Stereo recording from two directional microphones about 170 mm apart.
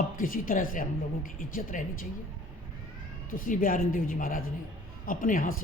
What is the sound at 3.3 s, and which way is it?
A woman's voice, 55° left (ahead or behind).